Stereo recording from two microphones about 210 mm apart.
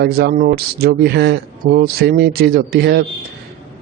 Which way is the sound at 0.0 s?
50° right (ahead or behind).